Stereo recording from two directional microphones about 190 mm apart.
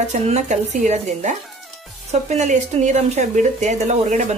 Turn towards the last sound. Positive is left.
turn(degrees=-40)  # may be behind; listen again after turning